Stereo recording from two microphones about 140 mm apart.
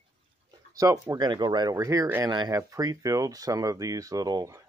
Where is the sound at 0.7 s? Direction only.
25° right (ahead or behind).